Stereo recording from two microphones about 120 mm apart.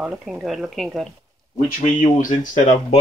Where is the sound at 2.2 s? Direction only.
90° left.